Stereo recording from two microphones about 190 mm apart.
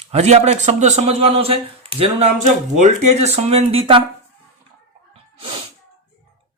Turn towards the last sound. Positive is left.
turn(degrees=-25)  # may be behind; listen again after turning